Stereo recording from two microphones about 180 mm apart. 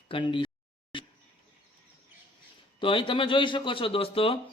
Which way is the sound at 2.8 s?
30° left (ahead or behind).